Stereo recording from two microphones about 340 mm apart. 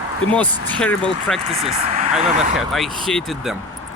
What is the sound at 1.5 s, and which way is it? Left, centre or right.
Speech, centre.